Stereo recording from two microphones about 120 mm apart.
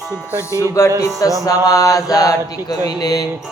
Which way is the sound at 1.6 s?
30° left (ahead or behind).